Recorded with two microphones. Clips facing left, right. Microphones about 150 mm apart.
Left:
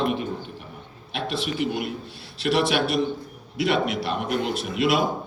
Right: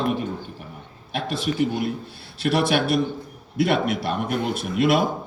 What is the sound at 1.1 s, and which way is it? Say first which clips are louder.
A man's voice: right 3 dB; 45° right (ahead or behind).